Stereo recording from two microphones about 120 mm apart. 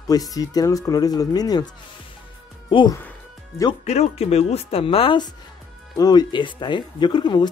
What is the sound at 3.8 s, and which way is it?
Speech, 60° left (ahead or behind).